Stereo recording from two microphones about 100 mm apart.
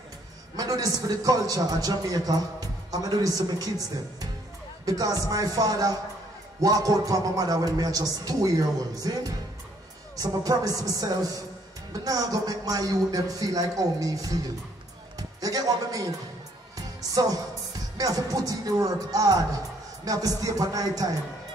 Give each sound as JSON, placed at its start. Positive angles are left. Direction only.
{"t": 0.6, "sound": "a man's voice", "side_deg": -40}
{"t": 16.7, "sound": "music", "side_deg": -40}
{"t": 17.9, "sound": "a man's voice", "side_deg": -35}